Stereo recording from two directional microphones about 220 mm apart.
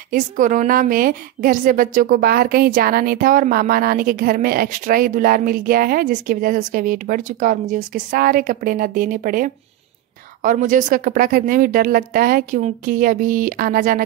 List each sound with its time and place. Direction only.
0.1 s a woman's voice: 35° right (ahead or behind)